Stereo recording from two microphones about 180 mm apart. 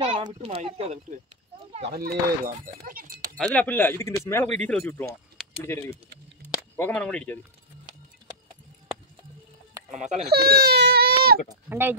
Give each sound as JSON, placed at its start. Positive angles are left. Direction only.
{"t": 0.2, "sound": "speech", "side_deg": -35}
{"t": 1.9, "sound": "speech", "side_deg": -55}
{"t": 3.3, "sound": "speech", "side_deg": 10}
{"t": 9.8, "sound": "speech", "side_deg": -40}
{"t": 10.3, "sound": "speech", "side_deg": -60}
{"t": 11.4, "sound": "speech", "side_deg": -10}